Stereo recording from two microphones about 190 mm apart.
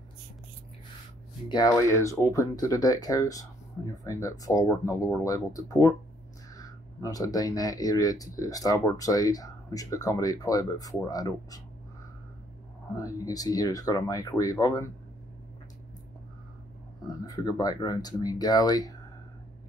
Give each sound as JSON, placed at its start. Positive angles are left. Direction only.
{"t": 1.5, "sound": "speech", "side_deg": 20}
{"t": 12.9, "sound": "speech", "side_deg": 20}
{"t": 17.3, "sound": "speech", "side_deg": 20}